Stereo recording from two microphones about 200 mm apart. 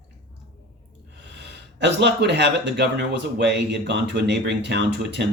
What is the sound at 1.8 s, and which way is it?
A man's voice, 60° right (ahead or behind).